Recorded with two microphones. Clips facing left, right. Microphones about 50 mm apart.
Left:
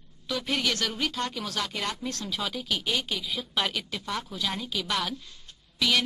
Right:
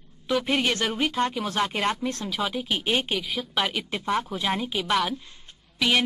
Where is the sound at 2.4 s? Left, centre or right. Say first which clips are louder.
Right 7 dB; centre.